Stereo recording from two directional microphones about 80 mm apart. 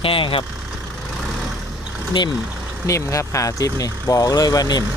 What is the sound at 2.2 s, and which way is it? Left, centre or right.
Speech, left.